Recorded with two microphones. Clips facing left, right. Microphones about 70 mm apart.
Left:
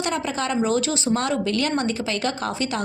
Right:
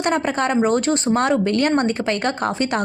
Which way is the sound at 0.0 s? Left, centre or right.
Right.